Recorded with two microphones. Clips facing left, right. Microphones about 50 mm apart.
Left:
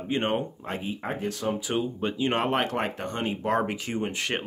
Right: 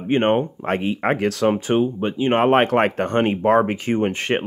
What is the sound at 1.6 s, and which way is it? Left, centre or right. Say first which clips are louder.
Speech: right 9 dB; right.